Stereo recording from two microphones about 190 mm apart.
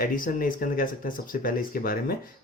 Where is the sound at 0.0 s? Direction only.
45° left (ahead or behind).